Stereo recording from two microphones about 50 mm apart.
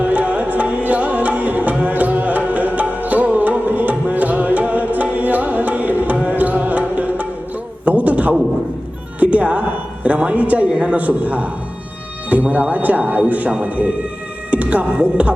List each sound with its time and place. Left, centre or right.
0.0 s music: right
5.1 s tabla: right
6.2 s music: right
7.9 s a sound: right
9.2 s speech: right